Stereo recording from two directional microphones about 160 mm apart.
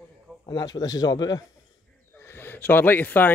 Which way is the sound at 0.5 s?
25° left (ahead or behind).